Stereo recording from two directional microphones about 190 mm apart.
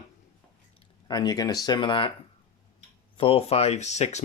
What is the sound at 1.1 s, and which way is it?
Speech, 20° left (ahead or behind).